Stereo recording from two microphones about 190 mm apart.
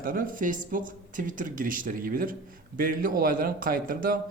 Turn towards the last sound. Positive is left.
turn(degrees=-50)  # may be behind; listen again after turning